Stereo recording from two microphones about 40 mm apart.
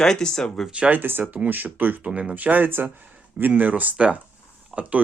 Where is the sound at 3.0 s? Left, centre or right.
Right.